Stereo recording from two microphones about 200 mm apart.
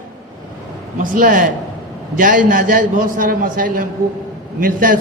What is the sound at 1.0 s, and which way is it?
A man's voice, 40° right (ahead or behind).